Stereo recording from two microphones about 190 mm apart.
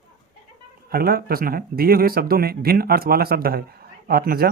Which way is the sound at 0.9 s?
50° right (ahead or behind).